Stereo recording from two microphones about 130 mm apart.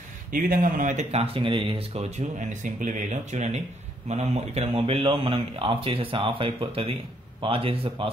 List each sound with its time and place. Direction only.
0.3 s speech: 90° right; by 8.1 s 45° right (ahead or behind)